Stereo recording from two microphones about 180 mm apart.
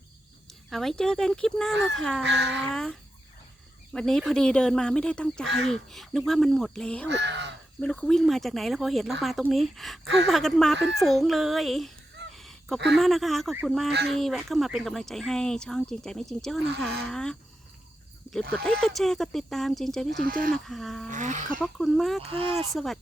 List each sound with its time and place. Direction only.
0.7 s speech: centre (ahead or behind)
2.2 s speech: 75° right (ahead or behind)
2.7 s speech: 5° left (ahead or behind)
7.1 s crow: 75° right (ahead or behind)
7.8 s speech: 5° left (ahead or behind)
12.3 s a sound: centre (ahead or behind)
13.0 s speech: centre (ahead or behind)
18.5 s speech: 5° left (ahead or behind)
20.1 s speech: 55° right (ahead or behind)
20.7 s speech: centre (ahead or behind)
21.1 s speech: 45° right (ahead or behind)
21.6 s speech: centre (ahead or behind)
22.3 s speech: 30° right (ahead or behind)
22.7 s speech: centre (ahead or behind)